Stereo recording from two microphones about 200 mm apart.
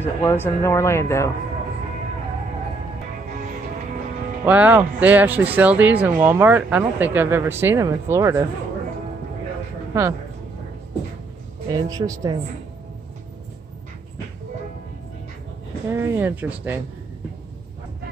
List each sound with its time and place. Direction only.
0.0 s speech: 10° left (ahead or behind)
4.5 s speech: 10° right (ahead or behind)
11.7 s speech: 20° right (ahead or behind)
15.9 s speech: 10° right (ahead or behind)